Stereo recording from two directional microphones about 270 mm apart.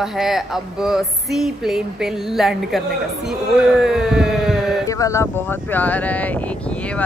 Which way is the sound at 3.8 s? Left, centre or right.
Centre.